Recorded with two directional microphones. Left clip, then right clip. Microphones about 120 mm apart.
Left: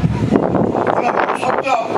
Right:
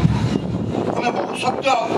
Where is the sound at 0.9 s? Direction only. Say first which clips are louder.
Left 4 dB; 35° left (ahead or behind).